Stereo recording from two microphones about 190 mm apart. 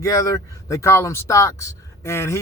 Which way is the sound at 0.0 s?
15° left (ahead or behind).